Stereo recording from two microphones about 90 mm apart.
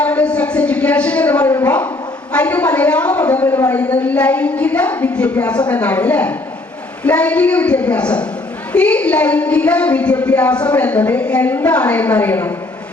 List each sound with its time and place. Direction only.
0.0 s a woman's voice: 15° left (ahead or behind)
3.4 s a man's voice: 35° left (ahead or behind)
3.7 s a woman's voice: 20° left (ahead or behind)